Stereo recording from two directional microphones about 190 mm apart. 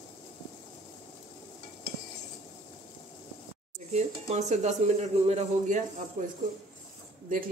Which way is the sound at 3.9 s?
35° right (ahead or behind).